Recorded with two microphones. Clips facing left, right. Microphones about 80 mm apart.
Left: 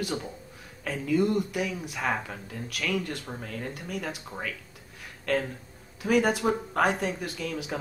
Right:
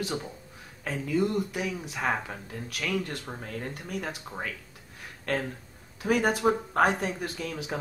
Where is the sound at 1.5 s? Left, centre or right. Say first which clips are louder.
Left 1 dB; right.